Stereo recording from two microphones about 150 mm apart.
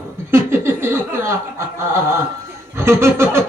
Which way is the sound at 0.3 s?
15° right (ahead or behind).